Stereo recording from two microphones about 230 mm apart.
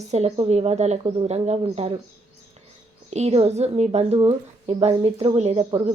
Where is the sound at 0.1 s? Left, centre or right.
Right.